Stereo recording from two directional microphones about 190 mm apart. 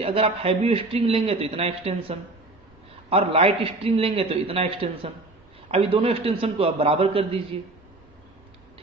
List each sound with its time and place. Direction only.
0.0 s a man's voice: 30° right (ahead or behind)